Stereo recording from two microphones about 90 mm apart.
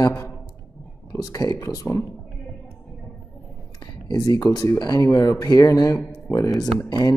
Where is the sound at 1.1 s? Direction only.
40° left (ahead or behind).